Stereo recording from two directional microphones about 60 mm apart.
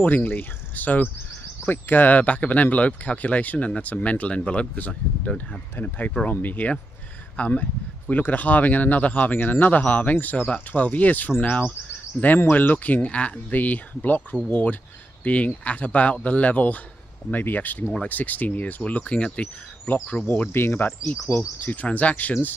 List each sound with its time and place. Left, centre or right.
0.0 s speech: left